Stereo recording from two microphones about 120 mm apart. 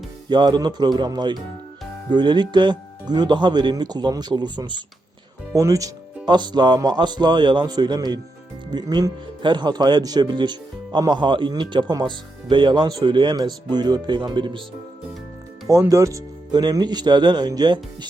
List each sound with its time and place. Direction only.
0.3 s speech: 40° right (ahead or behind)
5.5 s speech: 30° right (ahead or behind)
6.2 s speech: 40° right (ahead or behind)
15.6 s speech: 25° right (ahead or behind)